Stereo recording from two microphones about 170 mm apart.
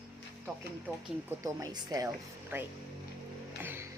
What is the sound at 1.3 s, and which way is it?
A woman's voice, 15° right (ahead or behind).